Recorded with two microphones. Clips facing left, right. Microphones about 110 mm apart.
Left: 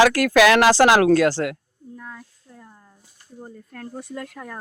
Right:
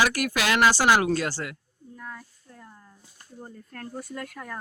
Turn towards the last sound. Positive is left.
turn(degrees=20)  # may be behind; listen again after turning